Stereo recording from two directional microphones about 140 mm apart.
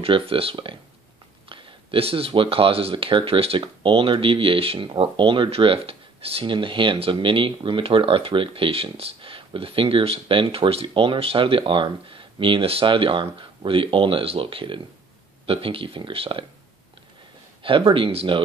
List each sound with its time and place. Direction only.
0.0 s speech: 40° right (ahead or behind)
17.6 s speech: 40° right (ahead or behind)